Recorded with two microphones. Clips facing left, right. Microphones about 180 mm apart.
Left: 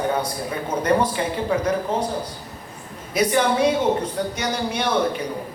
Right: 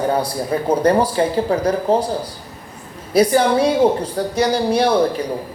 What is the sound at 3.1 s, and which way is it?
Speech, 35° right (ahead or behind).